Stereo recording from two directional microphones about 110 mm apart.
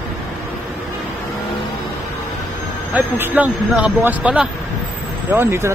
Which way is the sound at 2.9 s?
15° right (ahead or behind).